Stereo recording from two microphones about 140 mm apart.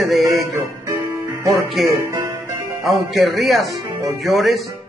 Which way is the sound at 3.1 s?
Centre (ahead or behind).